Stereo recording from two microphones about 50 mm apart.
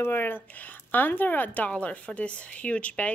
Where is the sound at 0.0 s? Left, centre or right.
Left.